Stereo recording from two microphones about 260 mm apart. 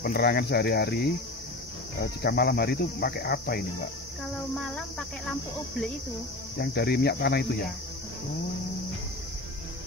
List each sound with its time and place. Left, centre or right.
0.0 s cricket: left
4.6 s speech: centre
6.6 s cricket: left